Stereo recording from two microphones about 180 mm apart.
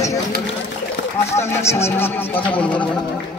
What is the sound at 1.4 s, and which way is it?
A man's voice, 15° left (ahead or behind).